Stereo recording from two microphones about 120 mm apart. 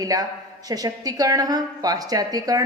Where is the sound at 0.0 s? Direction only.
30° right (ahead or behind).